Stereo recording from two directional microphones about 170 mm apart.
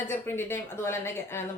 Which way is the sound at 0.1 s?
15° left (ahead or behind).